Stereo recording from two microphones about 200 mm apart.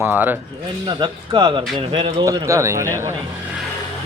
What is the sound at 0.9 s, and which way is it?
Speech, 20° right (ahead or behind).